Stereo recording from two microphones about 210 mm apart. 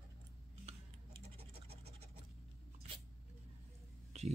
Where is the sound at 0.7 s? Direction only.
30° right (ahead or behind).